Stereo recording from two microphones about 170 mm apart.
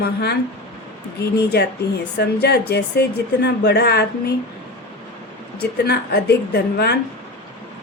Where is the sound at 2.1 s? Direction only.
80° left.